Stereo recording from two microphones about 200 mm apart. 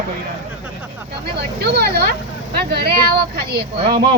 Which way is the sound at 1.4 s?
55° right (ahead or behind).